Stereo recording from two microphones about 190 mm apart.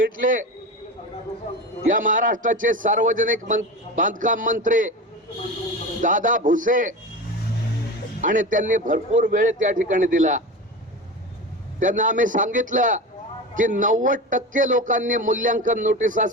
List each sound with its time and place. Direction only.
0.0 s a man's voice: 45° right (ahead or behind)
1.9 s a man's voice: 45° right (ahead or behind)
6.0 s a man's voice: 45° right (ahead or behind)
8.2 s a man's voice: 45° right (ahead or behind)
11.8 s a man's voice: 45° right (ahead or behind)